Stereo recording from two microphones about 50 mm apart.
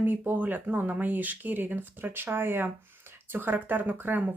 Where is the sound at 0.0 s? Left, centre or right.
Right.